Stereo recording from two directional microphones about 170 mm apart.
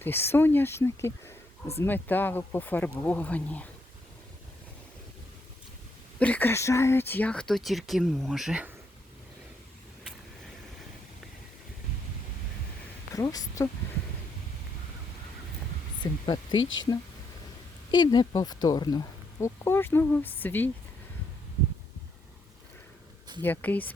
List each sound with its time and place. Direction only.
0.0 s speech: 15° left (ahead or behind)
6.1 s speech: 10° left (ahead or behind)
13.1 s speech: 20° left (ahead or behind)
16.2 s speech: 25° left (ahead or behind)
23.4 s speech: 10° left (ahead or behind)